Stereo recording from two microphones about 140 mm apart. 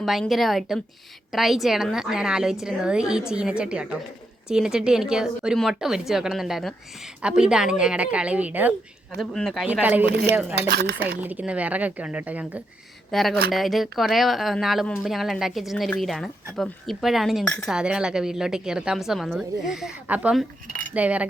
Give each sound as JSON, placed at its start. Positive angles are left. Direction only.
{"t": 0.0, "sound": "a woman's voice", "side_deg": 0}
{"t": 9.1, "sound": "a woman's voice", "side_deg": 0}
{"t": 9.6, "sound": "a woman's voice", "side_deg": -10}
{"t": 10.7, "sound": "speech", "side_deg": -90}
{"t": 11.2, "sound": "a woman's voice", "side_deg": -10}
{"t": 13.1, "sound": "a woman's voice", "side_deg": 0}